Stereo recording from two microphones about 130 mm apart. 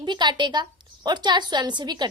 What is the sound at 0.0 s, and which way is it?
A woman's voice, 35° right (ahead or behind).